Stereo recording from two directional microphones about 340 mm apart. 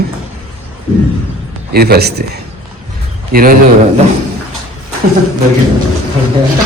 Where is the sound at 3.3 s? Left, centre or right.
Right.